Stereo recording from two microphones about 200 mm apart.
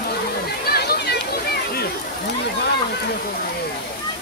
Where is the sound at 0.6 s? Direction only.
50° left (ahead or behind).